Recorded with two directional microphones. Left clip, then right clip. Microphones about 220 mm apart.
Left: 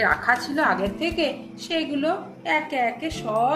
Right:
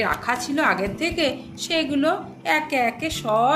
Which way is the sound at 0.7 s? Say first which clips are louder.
Right 1 dB; 35° right (ahead or behind).